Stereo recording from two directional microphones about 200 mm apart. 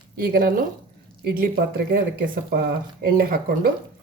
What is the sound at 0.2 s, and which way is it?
Speech, 50° right (ahead or behind).